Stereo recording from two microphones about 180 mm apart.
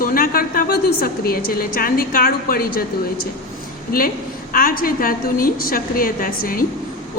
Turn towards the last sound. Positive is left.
turn(degrees=50)  # may be behind; listen again after turning